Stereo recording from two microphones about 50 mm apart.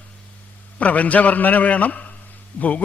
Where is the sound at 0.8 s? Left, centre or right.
Left.